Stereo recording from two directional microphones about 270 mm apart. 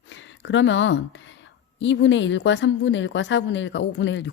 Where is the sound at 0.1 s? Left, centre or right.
Left.